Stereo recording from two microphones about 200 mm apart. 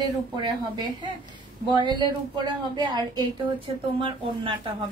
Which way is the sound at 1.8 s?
20° right (ahead or behind).